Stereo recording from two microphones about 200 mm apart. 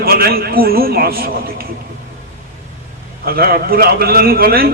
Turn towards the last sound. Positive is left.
turn(degrees=-50)  # may be behind; listen again after turning